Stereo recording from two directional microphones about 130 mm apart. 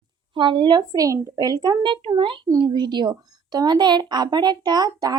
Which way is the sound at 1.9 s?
40° right (ahead or behind).